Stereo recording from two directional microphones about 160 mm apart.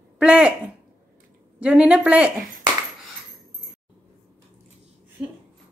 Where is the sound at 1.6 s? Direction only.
5° right (ahead or behind).